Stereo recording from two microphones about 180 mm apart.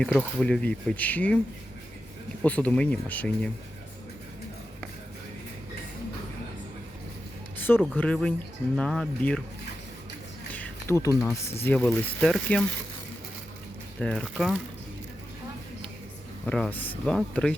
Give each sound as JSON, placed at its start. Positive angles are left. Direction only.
{"t": 0.0, "sound": "speech", "side_deg": 5}
{"t": 2.4, "sound": "speech", "side_deg": 10}
{"t": 7.9, "sound": "speech", "side_deg": 5}
{"t": 10.5, "sound": "speech", "side_deg": 10}
{"t": 14.0, "sound": "speech", "side_deg": 5}
{"t": 16.5, "sound": "speech", "side_deg": 5}